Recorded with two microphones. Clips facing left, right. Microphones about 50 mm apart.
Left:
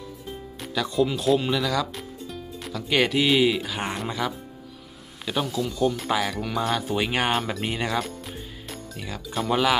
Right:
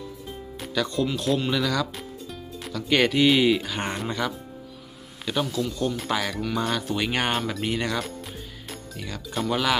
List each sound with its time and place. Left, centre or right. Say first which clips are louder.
0.6 s speech: left 2 dB; centre